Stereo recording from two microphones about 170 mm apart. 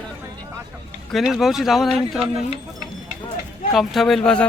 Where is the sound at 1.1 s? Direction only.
Centre (ahead or behind).